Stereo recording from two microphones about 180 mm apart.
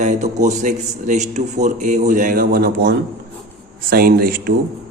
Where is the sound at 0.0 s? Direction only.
40° right (ahead or behind); by 4.5 s 55° right (ahead or behind).